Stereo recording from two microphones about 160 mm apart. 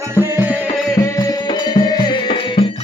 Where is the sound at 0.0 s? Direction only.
15° right (ahead or behind).